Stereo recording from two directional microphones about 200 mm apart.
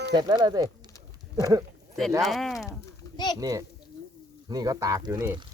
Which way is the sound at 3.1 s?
20° left (ahead or behind).